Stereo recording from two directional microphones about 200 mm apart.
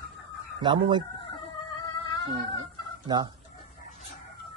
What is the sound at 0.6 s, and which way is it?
Speech, 25° right (ahead or behind).